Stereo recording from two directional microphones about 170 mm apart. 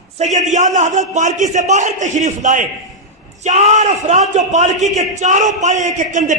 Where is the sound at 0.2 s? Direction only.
45° right (ahead or behind).